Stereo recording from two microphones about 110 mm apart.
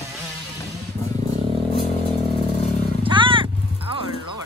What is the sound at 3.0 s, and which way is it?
Vehicle, 50° right (ahead or behind).